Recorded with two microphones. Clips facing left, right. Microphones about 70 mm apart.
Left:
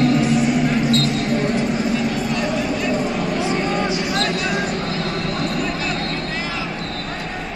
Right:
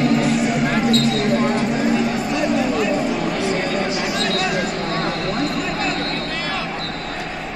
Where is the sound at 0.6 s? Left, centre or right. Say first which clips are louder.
Even; right.